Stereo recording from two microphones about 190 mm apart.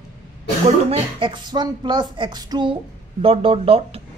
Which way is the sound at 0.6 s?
30° right (ahead or behind).